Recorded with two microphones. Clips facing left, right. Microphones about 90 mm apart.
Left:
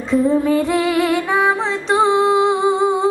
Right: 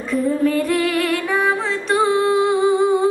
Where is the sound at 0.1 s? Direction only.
20° left (ahead or behind).